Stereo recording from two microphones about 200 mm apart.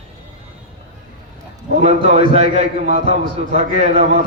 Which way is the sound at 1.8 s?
30° right (ahead or behind).